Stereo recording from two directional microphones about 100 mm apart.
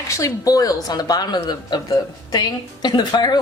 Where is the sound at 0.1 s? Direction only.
35° left (ahead or behind).